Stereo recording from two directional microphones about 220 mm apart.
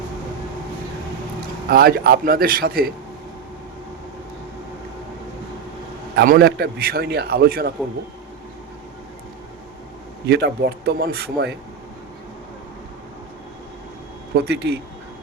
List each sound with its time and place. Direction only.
1.7 s a man's voice: 40° right (ahead or behind)
6.1 s a man's voice: 45° right (ahead or behind)
10.2 s a man's voice: 50° right (ahead or behind)
14.3 s a man's voice: 45° right (ahead or behind)